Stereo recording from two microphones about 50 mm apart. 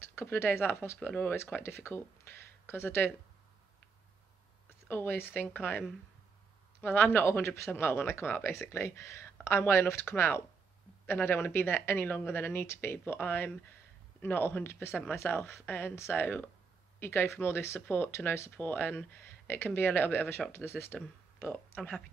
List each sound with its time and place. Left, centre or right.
0.0 s a woman's voice: left
4.6 s speech: left
7.4 s speech: left
7.7 s a woman's voice: left
17.0 s a woman's voice: left
17.7 s a woman's voice: left